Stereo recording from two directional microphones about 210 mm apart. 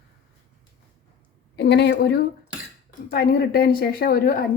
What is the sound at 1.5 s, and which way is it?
A woman's voice, 55° left (ahead or behind).